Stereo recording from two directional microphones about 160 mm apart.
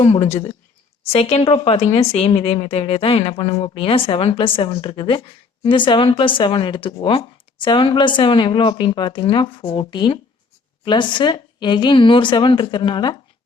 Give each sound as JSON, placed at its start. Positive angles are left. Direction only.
{"t": 0.0, "sound": "speech", "side_deg": 35}